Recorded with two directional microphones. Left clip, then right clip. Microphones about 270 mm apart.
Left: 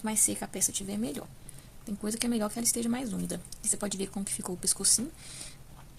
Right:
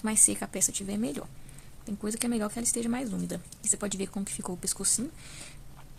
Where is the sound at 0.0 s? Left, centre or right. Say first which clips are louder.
Right 3 dB; centre.